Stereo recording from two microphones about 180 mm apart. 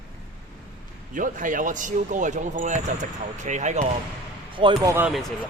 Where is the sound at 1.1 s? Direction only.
45° right (ahead or behind).